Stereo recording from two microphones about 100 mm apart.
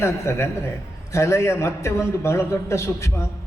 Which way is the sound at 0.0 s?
25° left (ahead or behind).